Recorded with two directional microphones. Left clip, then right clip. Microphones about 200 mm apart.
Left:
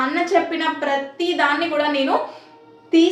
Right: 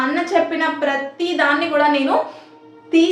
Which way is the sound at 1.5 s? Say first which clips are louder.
Right 4 dB; 10° right (ahead or behind).